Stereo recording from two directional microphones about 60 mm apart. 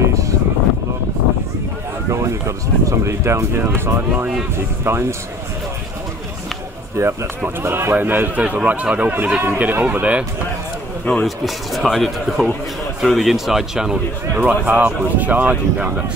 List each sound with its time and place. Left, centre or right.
0.0 s a sound: right
2.0 s a man's voice: right
7.0 s speech: right
7.9 s a man's voice: right
9.1 s a man's voice: right
11.2 s speech: centre
14.3 s speech: right